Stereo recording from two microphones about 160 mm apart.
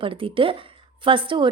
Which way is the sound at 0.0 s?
35° right (ahead or behind).